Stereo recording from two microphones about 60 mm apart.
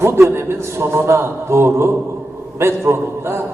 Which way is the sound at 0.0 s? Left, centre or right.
Right.